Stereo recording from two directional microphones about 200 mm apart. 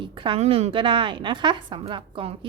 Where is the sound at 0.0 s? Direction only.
25° right (ahead or behind).